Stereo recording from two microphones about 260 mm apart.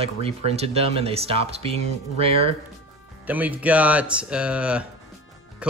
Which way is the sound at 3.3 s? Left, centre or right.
Centre.